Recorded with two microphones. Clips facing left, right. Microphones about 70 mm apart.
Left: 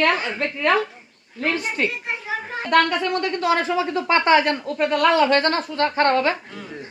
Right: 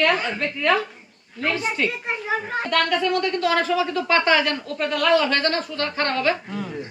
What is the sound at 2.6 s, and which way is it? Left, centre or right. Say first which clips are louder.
Speech: left 4 dB; left.